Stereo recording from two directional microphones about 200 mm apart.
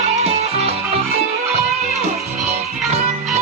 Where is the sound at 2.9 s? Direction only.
30° right (ahead or behind).